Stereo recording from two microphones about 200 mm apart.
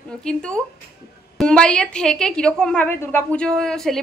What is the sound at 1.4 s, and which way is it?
A woman's voice, 5° left (ahead or behind).